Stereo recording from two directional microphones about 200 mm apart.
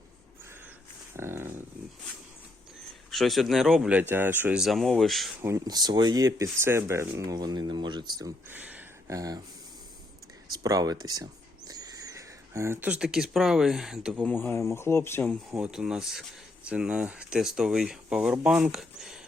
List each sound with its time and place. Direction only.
1.1 s a sound: 10° right (ahead or behind)
3.1 s speech: centre (ahead or behind)
5.4 s speech: 15° right (ahead or behind)
8.4 s speech: 10° right (ahead or behind)
10.5 s speech: 20° right (ahead or behind); by 14.3 s 5° right (ahead or behind)
14.3 s speech: 10° left (ahead or behind)